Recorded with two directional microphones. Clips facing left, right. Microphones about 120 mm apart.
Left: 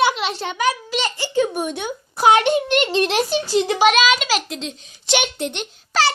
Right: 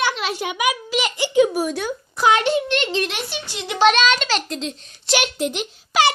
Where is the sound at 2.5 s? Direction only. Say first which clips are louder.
Left 2 dB; 15° left (ahead or behind).